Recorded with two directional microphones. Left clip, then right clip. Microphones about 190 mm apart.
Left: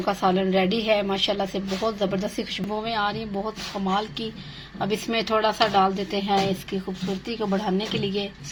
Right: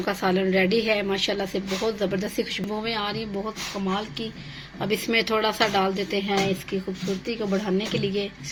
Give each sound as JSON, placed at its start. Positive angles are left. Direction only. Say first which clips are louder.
{"t": 0.0, "sound": "a woman's voice", "louder": "left 1 dB", "side_deg": 15}
{"t": 4.8, "sound": "a woman's voice", "louder": "right 2 dB", "side_deg": 10}